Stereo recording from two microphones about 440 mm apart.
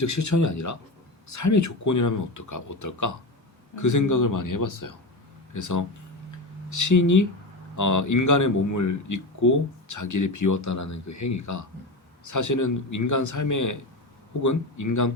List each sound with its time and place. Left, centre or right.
0.0 s a man's voice: left